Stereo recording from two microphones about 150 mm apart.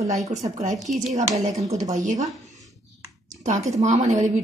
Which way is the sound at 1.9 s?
55° right (ahead or behind).